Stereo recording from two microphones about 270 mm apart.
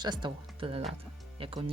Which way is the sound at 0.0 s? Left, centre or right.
Centre.